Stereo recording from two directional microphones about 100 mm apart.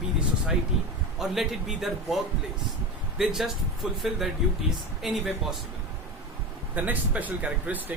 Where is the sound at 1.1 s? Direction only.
5° right (ahead or behind).